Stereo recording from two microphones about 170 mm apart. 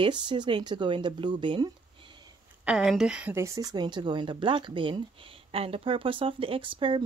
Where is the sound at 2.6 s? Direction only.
5° right (ahead or behind).